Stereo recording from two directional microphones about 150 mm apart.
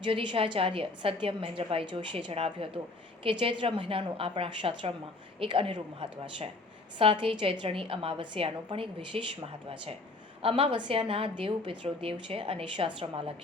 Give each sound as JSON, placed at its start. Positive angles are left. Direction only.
{"t": 0.0, "sound": "a woman's voice", "side_deg": -35}